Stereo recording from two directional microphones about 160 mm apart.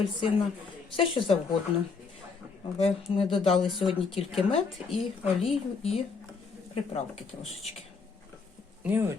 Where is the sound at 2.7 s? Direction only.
40° left (ahead or behind).